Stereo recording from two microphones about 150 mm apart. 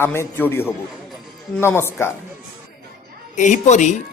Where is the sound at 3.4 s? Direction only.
55° left (ahead or behind).